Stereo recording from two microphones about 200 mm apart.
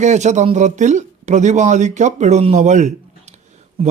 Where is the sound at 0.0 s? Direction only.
35° right (ahead or behind).